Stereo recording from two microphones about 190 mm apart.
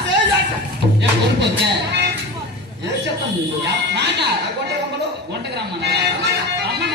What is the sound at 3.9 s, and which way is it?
Speech, 65° right (ahead or behind).